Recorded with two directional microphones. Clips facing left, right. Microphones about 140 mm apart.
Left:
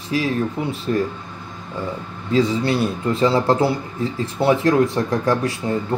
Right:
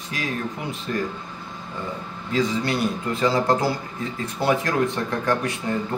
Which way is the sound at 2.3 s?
30° left (ahead or behind).